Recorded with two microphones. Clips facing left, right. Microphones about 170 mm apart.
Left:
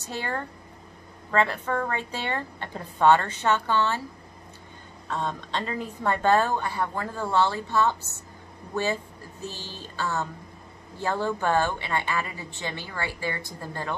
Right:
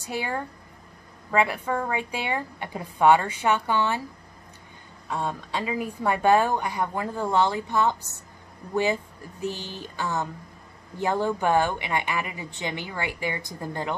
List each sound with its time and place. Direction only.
0.0 s a woman's voice: 10° right (ahead or behind)
5.0 s a woman's voice: 10° right (ahead or behind)